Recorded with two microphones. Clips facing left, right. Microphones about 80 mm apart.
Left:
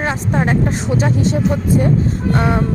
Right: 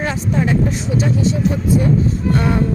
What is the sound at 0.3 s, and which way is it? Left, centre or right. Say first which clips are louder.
Speech: even; left.